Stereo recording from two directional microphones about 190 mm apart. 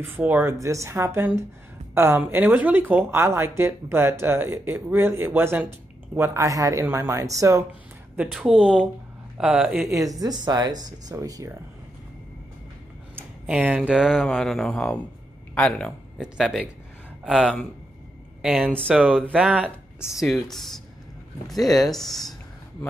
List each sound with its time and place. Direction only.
0.0 s speech: 10° right (ahead or behind)
8.2 s speech: centre (ahead or behind)
9.8 s speech: 20° right (ahead or behind)
13.1 s speech: 10° right (ahead or behind)
18.9 s speech: 5° right (ahead or behind)